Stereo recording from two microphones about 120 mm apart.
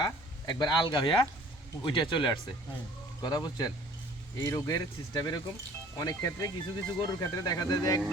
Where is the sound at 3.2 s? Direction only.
30° left (ahead or behind).